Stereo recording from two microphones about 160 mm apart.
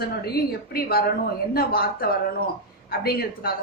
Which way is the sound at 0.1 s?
75° left (ahead or behind).